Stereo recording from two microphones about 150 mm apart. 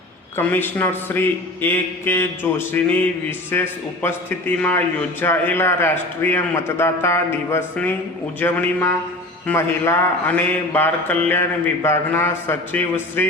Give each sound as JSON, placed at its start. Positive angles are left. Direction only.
{"t": 0.3, "sound": "a man's voice", "side_deg": 15}